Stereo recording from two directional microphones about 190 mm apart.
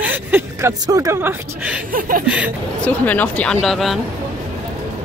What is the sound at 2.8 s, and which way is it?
A woman's voice, 10° left (ahead or behind).